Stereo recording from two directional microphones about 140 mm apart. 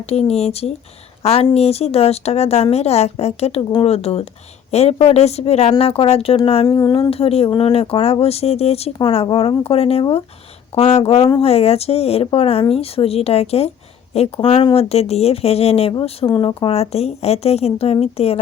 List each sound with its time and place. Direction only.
0.0 s speech: 45° left (ahead or behind)
6.7 s a sound: 30° left (ahead or behind)
7.1 s speech: 45° left (ahead or behind)
9.2 s speech: 35° left (ahead or behind)